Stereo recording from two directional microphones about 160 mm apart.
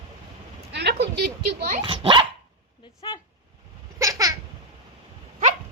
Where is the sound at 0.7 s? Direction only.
90° right.